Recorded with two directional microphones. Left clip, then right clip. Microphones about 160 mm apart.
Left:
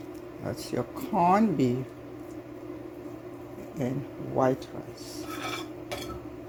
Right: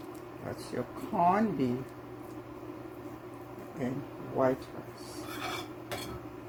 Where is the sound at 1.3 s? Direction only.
60° left (ahead or behind).